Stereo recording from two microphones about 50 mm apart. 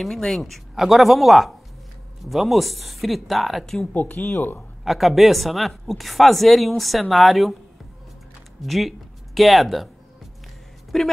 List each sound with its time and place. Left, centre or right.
0.0 s speech: centre
3.9 s speech: left
4.8 s speech: centre
8.6 s speech: centre
10.9 s speech: centre